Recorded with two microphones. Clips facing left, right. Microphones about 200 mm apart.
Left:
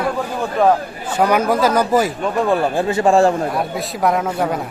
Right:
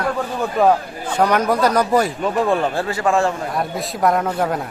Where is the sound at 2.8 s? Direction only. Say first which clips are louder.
Left 5 dB; 20° left (ahead or behind).